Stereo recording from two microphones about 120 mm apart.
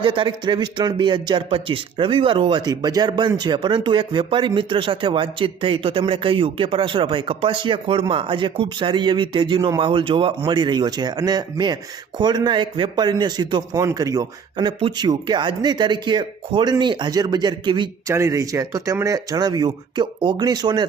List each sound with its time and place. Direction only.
0.0 s speech: 45° right (ahead or behind); by 14.3 s 30° right (ahead or behind)
14.5 s speech: 45° right (ahead or behind)
18.1 s speech: 25° right (ahead or behind)